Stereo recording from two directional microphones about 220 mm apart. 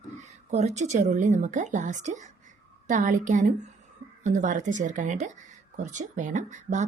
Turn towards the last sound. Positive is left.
turn(degrees=-35)  # may be behind; listen again after turning